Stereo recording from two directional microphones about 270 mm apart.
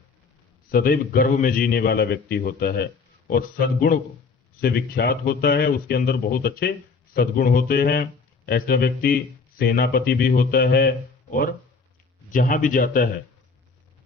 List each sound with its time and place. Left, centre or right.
0.7 s speech: left